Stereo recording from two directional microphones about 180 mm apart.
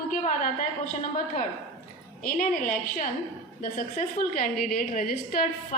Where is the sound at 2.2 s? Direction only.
45° left (ahead or behind).